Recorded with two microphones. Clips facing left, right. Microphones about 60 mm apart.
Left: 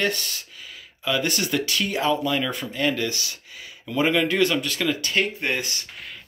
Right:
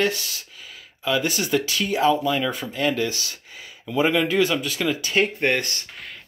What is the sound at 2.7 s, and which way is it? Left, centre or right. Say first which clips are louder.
Speech: even; right.